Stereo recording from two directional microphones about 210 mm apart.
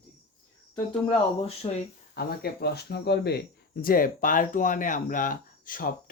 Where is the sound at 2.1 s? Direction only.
50° left (ahead or behind).